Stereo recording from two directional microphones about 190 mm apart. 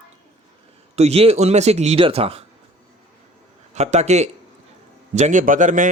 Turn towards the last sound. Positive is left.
turn(degrees=-45)  # may be behind; listen again after turning